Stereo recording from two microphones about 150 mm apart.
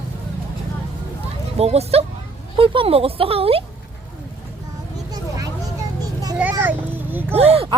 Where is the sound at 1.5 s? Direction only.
45° right (ahead or behind).